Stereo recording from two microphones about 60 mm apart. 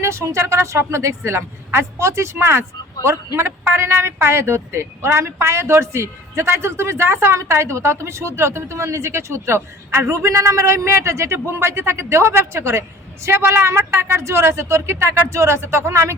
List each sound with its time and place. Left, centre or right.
0.0 s speech: right
10.2 s speech: right